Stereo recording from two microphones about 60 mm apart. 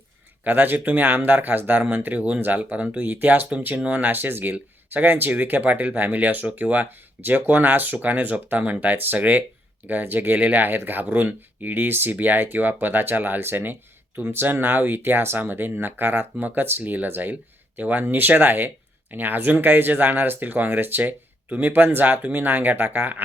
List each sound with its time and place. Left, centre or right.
0.4 s speech: right